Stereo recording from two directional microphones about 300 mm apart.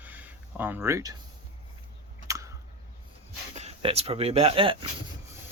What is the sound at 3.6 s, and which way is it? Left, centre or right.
Speech, right.